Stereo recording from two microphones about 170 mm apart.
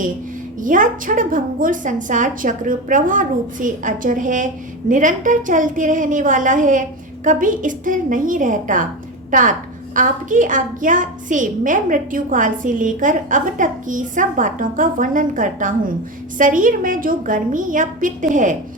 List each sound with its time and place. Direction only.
0.6 s a woman's voice: 50° right (ahead or behind)